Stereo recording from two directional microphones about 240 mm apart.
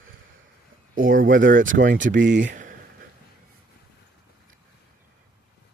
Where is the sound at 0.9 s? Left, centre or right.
Right.